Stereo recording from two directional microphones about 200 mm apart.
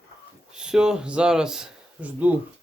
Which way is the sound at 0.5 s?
5° right (ahead or behind).